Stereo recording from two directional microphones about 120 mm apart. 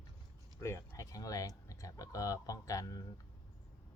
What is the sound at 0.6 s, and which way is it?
Speech, 25° left (ahead or behind).